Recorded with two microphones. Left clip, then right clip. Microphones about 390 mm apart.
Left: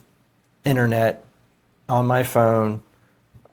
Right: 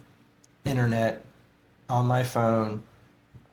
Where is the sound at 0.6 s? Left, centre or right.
Left.